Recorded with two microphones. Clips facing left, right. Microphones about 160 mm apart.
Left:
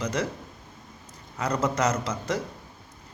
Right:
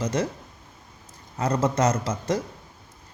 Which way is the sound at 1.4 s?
25° right (ahead or behind).